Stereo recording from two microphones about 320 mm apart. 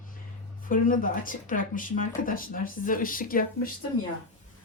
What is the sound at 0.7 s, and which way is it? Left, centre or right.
Speech, left.